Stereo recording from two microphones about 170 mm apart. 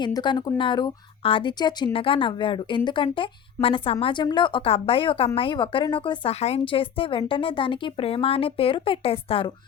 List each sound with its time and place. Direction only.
0.0 s a woman's voice: 25° left (ahead or behind)